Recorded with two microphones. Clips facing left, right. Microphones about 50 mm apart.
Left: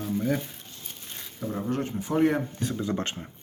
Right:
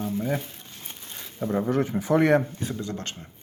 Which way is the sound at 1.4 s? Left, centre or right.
Right.